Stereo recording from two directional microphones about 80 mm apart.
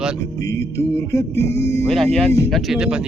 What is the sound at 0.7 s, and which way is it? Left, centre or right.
Music, left.